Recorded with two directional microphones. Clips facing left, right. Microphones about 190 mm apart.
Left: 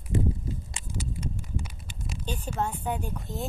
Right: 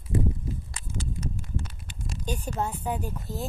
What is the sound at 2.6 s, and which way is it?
Speech, 5° right (ahead or behind).